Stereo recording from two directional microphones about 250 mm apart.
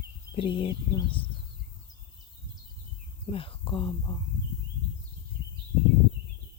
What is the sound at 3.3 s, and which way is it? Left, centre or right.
Speech, left.